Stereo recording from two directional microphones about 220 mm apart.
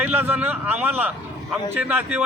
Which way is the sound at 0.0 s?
10° right (ahead or behind).